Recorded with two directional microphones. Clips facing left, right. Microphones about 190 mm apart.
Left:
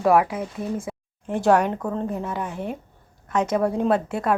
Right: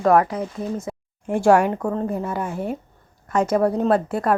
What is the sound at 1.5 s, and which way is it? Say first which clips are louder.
Speech: right 3 dB; 5° right (ahead or behind).